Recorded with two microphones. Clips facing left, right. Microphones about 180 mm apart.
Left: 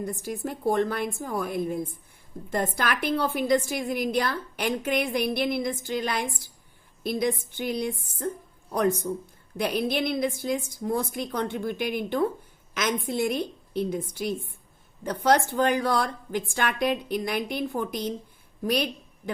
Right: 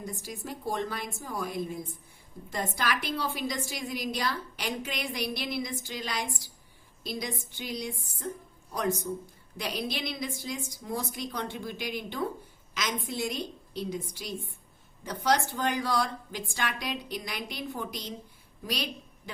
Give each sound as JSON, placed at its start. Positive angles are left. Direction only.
{"t": 0.0, "sound": "a woman's voice", "side_deg": 55}